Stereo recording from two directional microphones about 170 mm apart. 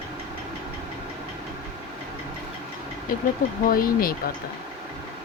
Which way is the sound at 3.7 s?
60° left (ahead or behind).